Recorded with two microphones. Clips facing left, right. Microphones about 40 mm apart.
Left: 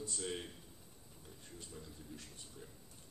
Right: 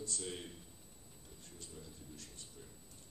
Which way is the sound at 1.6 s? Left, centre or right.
Centre.